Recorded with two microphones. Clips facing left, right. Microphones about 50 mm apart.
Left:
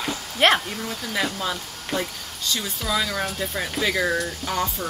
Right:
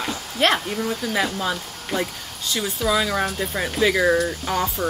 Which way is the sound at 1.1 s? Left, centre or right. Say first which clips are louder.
Even; centre.